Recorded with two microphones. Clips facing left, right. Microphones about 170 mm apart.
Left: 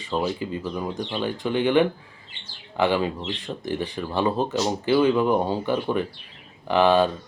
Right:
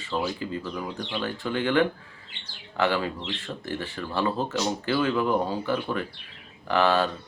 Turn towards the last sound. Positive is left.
turn(degrees=15)  # may be behind; listen again after turning